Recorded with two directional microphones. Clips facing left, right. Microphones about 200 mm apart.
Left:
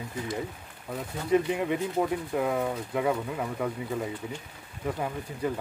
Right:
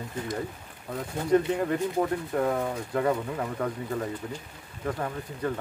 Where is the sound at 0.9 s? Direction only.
5° left (ahead or behind).